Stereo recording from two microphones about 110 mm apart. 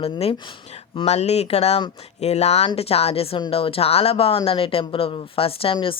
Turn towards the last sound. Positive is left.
turn(degrees=55)  # may be behind; listen again after turning